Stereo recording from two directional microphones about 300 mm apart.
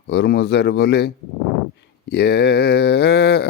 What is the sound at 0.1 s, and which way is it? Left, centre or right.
Mantra, left.